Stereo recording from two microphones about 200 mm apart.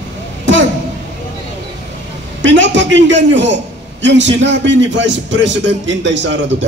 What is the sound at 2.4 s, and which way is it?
A man's voice, 70° right (ahead or behind).